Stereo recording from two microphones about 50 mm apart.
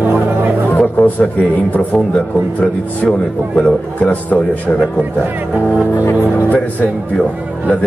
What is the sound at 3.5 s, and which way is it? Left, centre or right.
Speech, left.